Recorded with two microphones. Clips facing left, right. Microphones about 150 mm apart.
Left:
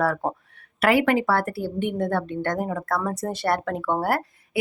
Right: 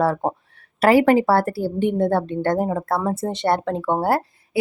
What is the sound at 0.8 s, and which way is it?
A woman's voice, 35° right (ahead or behind).